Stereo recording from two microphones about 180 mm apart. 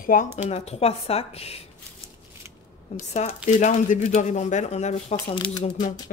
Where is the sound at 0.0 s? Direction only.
45° left (ahead or behind).